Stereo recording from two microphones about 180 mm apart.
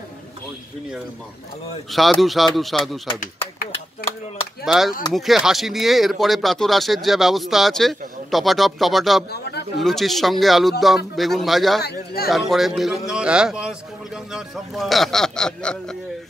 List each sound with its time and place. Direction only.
1.9 s speech: centre (ahead or behind)
4.6 s speech: centre (ahead or behind)
9.3 s a sound: 65° left (ahead or behind)
9.8 s speech: centre (ahead or behind)
11.8 s speech: 60° left (ahead or behind)
12.3 s speech: centre (ahead or behind)